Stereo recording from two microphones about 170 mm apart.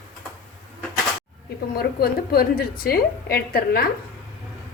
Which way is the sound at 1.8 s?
65° left (ahead or behind).